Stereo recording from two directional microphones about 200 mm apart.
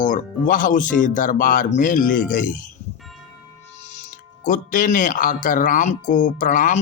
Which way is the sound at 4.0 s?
40° left (ahead or behind).